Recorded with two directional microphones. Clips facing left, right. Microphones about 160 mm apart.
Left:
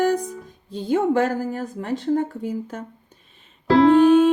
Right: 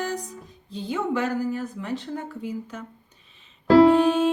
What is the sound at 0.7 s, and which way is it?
A woman's voice, 45° left (ahead or behind).